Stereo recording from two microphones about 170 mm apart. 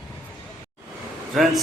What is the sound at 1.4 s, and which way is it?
Speech, centre (ahead or behind).